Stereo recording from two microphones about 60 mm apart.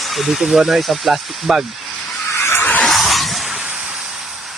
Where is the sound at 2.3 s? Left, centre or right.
Left.